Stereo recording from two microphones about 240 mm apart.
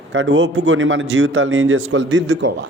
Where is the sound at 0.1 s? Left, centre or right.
Right.